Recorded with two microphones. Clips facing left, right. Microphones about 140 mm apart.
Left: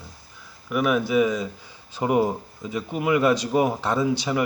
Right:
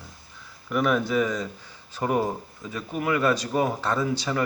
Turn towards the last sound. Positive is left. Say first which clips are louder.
# left 3 dB
turn(degrees=15)  # may be behind; listen again after turning